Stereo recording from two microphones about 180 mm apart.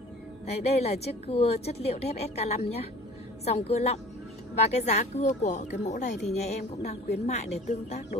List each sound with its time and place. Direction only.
0.5 s a woman's voice: 35° left (ahead or behind)